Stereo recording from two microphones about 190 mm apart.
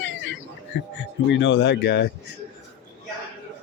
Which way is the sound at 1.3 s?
75° left (ahead or behind).